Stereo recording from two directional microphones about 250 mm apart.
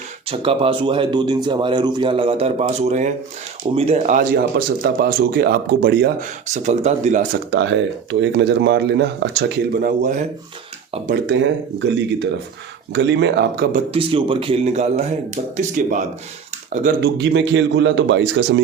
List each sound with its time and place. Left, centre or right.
0.3 s speech: right
7.6 s speech: right
12.9 s speech: right
13.7 s speech: right
17.2 s speech: right